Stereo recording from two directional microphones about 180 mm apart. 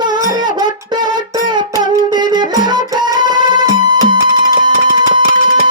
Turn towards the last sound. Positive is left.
turn(degrees=-25)  # may be behind; listen again after turning